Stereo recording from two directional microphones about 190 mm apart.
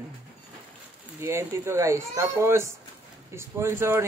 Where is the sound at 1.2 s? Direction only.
15° right (ahead or behind).